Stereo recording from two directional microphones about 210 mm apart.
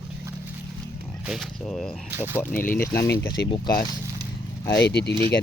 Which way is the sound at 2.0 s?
10° right (ahead or behind).